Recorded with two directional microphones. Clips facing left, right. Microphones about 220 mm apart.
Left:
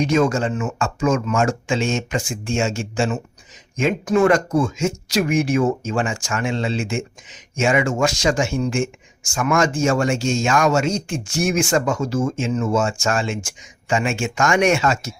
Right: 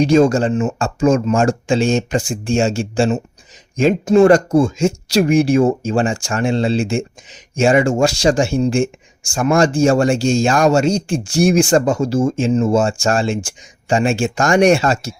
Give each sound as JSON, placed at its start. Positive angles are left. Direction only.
{"t": 0.0, "sound": "speech", "side_deg": -30}